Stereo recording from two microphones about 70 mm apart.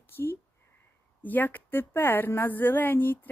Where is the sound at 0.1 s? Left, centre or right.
Left.